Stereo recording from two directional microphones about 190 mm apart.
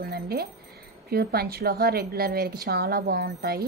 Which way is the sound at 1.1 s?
55° right (ahead or behind).